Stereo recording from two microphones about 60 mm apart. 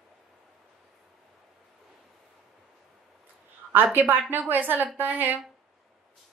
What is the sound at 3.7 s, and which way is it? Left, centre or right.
A woman's voice, right.